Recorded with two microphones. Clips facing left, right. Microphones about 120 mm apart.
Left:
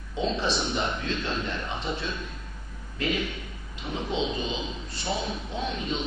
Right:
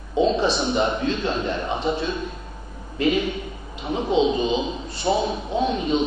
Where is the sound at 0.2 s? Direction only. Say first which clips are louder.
Right 8 dB; 15° right (ahead or behind).